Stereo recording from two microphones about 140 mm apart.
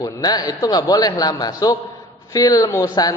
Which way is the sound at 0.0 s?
30° left (ahead or behind).